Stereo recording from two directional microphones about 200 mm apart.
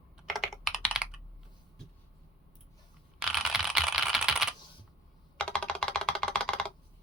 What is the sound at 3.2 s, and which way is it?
Computer keyboard, centre (ahead or behind).